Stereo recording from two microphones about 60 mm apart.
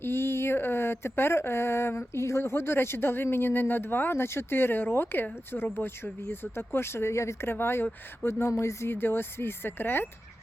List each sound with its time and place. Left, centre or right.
0.0 s speech: left
7.5 s speech: left